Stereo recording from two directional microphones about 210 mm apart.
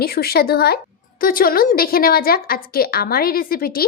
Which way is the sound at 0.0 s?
45° left (ahead or behind).